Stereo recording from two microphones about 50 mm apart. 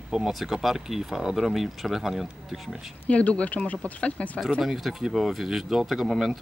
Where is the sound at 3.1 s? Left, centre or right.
Left.